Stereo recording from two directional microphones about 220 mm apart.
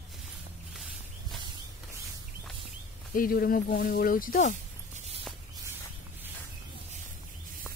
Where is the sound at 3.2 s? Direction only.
40° left (ahead or behind).